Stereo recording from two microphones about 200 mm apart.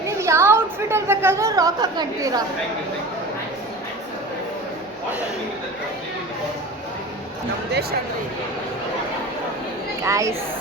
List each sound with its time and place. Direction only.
0.2 s a woman's voice: 15° right (ahead or behind)
7.7 s speech: 50° right (ahead or behind)
10.0 s speech: 15° right (ahead or behind)